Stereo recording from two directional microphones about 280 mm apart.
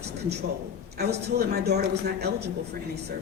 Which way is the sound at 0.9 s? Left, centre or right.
Right.